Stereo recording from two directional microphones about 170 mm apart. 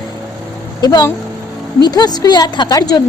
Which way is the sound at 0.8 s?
20° left (ahead or behind).